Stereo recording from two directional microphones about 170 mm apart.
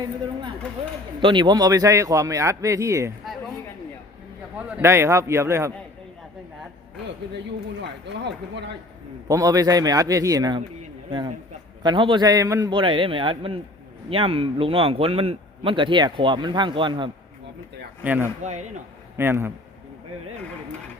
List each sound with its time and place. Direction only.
1.2 s speech: 25° right (ahead or behind)
4.5 s a man's voice: 10° right (ahead or behind)
7.8 s speech: 90° right
9.2 s speech: 20° right (ahead or behind)
11.8 s speech: 30° right (ahead or behind)
12.7 s a man's voice: 30° right (ahead or behind)
18.0 s a man's voice: 10° right (ahead or behind)